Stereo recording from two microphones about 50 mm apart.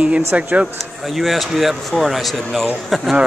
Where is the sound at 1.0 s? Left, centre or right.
Centre.